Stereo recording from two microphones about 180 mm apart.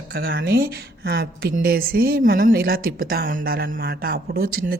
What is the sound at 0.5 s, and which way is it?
A woman's voice, 60° right (ahead or behind).